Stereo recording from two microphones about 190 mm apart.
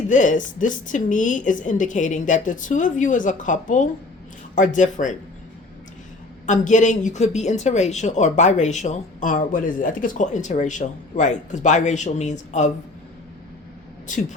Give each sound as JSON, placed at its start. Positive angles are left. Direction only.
{"t": 0.1, "sound": "speech", "side_deg": 40}
{"t": 6.4, "sound": "speech", "side_deg": 40}
{"t": 14.1, "sound": "speech", "side_deg": 40}